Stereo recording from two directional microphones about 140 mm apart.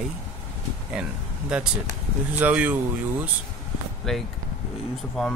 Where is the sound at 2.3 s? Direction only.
10° right (ahead or behind).